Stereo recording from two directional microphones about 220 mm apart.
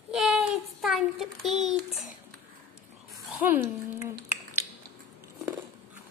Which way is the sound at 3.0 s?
Centre (ahead or behind).